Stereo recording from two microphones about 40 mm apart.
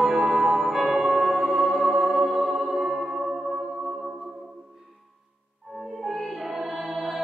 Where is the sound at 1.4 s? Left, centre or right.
Right.